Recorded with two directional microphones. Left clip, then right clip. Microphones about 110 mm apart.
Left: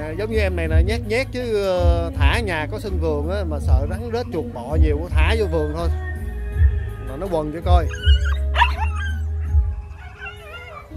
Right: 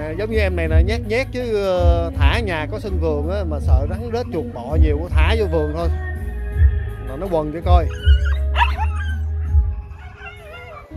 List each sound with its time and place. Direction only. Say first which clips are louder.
0.0 s speech: right 2 dB; 15° left (ahead or behind)
7.1 s speech: right 2 dB; 25° left (ahead or behind)